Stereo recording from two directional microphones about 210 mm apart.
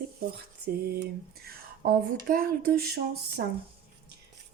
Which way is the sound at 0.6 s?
50° right (ahead or behind).